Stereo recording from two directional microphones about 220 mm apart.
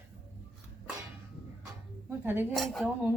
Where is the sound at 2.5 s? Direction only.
Centre (ahead or behind).